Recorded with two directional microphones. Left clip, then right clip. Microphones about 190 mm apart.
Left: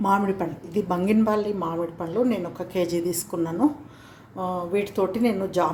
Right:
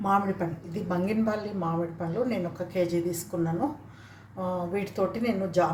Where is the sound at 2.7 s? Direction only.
40° left (ahead or behind).